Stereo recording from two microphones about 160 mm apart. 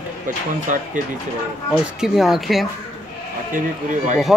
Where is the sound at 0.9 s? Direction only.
55° right (ahead or behind).